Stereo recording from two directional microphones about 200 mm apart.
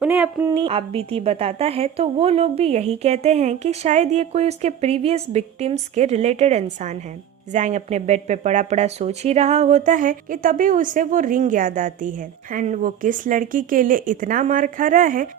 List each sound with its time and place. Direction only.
0.0 s speech: 5° right (ahead or behind)
0.5 s speech: 30° right (ahead or behind); by 15.3 s 45° right (ahead or behind)